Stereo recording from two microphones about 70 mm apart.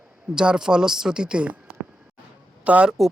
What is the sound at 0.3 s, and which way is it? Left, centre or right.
Speech, centre.